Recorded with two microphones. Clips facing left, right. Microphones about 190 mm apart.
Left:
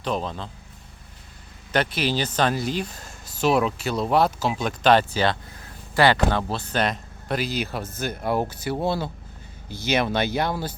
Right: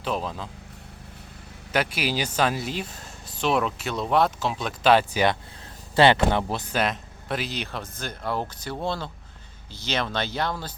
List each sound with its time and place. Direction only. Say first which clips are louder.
0.0 s speech: left 1 dB; 5° right (ahead or behind)
1.7 s speech: left 2 dB; 5° right (ahead or behind)
6.0 s speech: right 1 dB; 20° right (ahead or behind)
6.7 s speech: left 2 dB; centre (ahead or behind)